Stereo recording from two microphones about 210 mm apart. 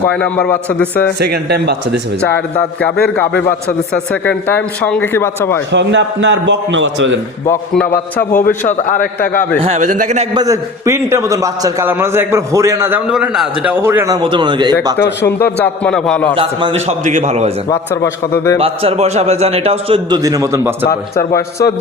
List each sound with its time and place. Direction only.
0.0 s speech: 5° left (ahead or behind)
1.2 s speech: 50° right (ahead or behind)
3.9 s speech: 5° left (ahead or behind)
5.7 s a man's voice: 55° right (ahead or behind)
7.4 s speech: 10° left (ahead or behind)
8.2 s a man's voice: 40° left (ahead or behind)
9.6 s a man's voice: 30° right (ahead or behind)
10.3 s a man's voice: 15° right (ahead or behind)
15.3 s speech: 10° left (ahead or behind)
16.3 s a man's voice: 25° right (ahead or behind)
17.7 s speech: 15° left (ahead or behind)
18.6 s a man's voice: 25° right (ahead or behind)
20.8 s a man's voice: 50° left (ahead or behind)